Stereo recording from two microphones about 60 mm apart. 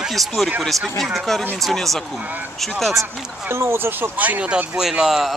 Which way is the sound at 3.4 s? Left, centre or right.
Right.